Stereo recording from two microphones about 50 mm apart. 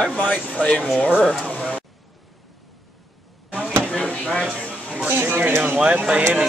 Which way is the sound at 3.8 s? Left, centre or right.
Left.